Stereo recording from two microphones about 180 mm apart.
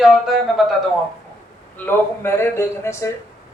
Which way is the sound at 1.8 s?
10° left (ahead or behind).